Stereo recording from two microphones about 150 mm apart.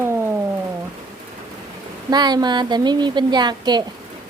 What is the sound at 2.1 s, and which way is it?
A woman's voice, 30° right (ahead or behind).